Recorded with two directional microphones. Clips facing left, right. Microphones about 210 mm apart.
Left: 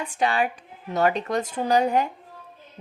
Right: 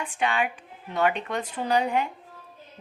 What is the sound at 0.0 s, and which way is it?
A woman's voice, 40° left (ahead or behind).